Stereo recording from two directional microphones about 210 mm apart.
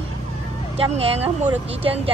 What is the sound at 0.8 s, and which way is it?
Speech, 25° right (ahead or behind).